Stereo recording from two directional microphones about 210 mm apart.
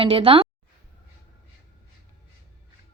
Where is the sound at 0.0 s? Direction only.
25° right (ahead or behind).